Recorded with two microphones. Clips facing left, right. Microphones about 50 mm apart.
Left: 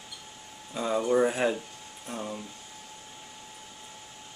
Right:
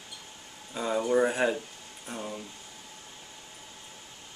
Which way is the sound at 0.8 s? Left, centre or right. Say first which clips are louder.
Left 1 dB; centre.